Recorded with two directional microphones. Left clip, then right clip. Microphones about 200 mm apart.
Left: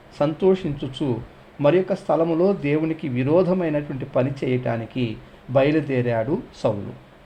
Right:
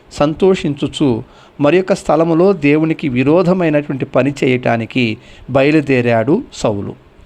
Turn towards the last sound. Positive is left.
turn(degrees=-30)  # may be behind; listen again after turning